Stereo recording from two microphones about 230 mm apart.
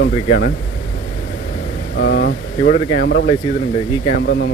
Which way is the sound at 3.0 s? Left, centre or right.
Left.